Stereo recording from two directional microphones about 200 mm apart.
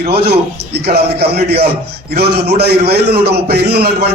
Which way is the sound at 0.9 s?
55° right (ahead or behind).